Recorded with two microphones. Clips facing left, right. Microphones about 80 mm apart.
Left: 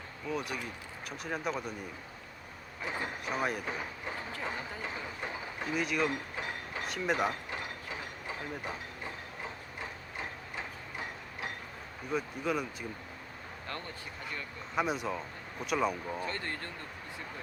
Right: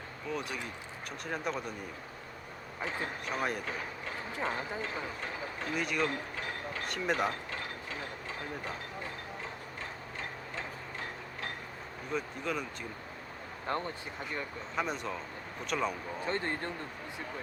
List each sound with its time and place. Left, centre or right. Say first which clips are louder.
0.3 s speech: left 1 dB; centre
2.8 s speech: even; centre
3.2 s speech: left 1 dB; centre
4.3 s speech: right 3 dB; right
4.8 s speech: right 1 dB; centre
5.7 s speech: left 1 dB; centre
6.3 s mechanisms: even; centre
6.8 s speech: left 1 dB; centre
7.5 s mechanisms: even; centre
12.1 s speech: left 2 dB; centre
13.7 s speech: right 8 dB; right
14.8 s speech: left 3 dB; centre
16.2 s speech: right 4 dB; right